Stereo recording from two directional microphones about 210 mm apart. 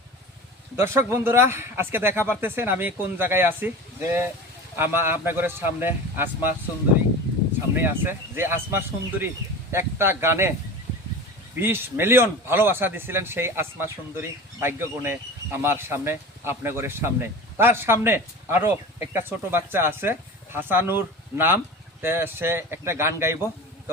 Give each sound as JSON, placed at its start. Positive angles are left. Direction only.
{"t": 0.8, "sound": "speech", "side_deg": -10}
{"t": 7.8, "sound": "speech", "side_deg": -10}
{"t": 11.6, "sound": "speech", "side_deg": -10}